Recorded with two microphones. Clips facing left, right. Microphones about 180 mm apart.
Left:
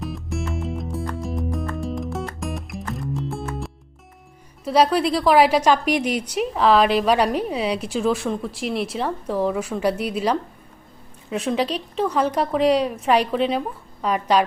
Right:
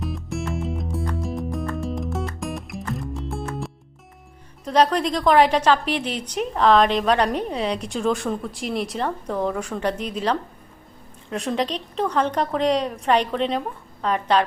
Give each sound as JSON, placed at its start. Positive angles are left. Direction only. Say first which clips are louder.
{"t": 0.0, "sound": "music", "louder": "even", "side_deg": 0}
{"t": 4.6, "sound": "a woman's voice", "louder": "left 1 dB", "side_deg": 5}